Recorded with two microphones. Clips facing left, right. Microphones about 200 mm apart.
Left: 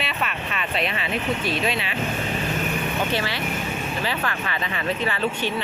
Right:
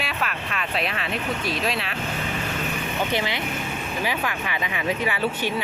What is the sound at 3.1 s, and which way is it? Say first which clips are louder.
Speech: even; 20° right (ahead or behind).